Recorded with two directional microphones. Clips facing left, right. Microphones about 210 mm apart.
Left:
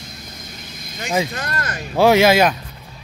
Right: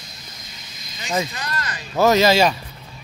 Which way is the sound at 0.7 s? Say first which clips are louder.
Left 7 dB; 55° left (ahead or behind).